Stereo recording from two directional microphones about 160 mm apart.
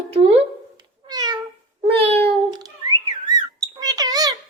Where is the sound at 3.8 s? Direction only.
25° right (ahead or behind).